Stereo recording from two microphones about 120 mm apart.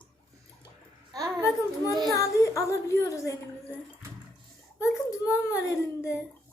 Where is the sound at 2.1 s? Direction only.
25° left (ahead or behind).